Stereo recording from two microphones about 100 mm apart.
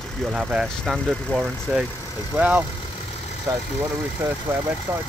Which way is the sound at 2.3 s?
15° right (ahead or behind).